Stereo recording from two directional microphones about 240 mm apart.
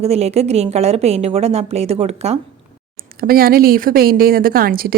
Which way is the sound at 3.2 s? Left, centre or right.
Right.